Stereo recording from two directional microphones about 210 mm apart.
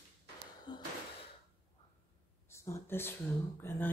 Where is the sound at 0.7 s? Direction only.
20° left (ahead or behind).